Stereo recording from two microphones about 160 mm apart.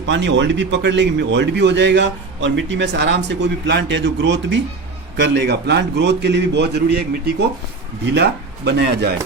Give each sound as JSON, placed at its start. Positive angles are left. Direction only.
{"t": 0.0, "sound": "a man's voice", "side_deg": -90}